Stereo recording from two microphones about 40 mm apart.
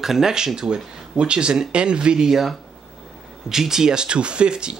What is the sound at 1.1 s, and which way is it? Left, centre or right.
Speech, right.